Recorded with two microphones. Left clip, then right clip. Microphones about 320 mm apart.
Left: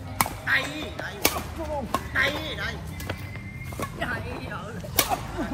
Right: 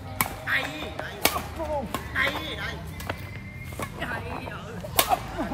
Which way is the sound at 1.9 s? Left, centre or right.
Centre.